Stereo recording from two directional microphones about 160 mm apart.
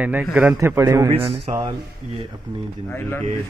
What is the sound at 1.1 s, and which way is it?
Speech, 35° right (ahead or behind).